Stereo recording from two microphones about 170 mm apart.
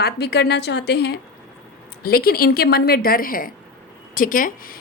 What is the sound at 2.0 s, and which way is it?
A woman's voice, 65° left (ahead or behind).